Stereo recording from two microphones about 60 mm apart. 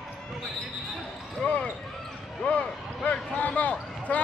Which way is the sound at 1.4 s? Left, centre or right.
Centre.